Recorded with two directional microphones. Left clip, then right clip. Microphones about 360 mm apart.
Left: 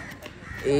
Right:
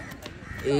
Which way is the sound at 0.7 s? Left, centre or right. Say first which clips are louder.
Left 2 dB; centre.